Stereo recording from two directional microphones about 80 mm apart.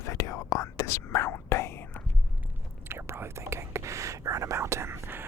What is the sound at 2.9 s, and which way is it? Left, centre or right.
Whispering, right.